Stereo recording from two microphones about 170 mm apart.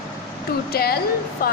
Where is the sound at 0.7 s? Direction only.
65° left (ahead or behind).